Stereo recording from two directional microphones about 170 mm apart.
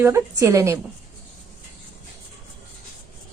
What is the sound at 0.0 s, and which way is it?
Speech, 15° right (ahead or behind).